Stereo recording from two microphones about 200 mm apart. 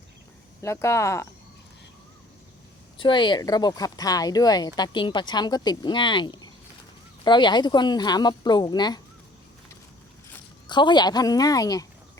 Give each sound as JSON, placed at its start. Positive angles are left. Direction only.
{"t": 0.6, "sound": "speech", "side_deg": 15}
{"t": 3.0, "sound": "speech", "side_deg": 25}
{"t": 10.7, "sound": "speech", "side_deg": 20}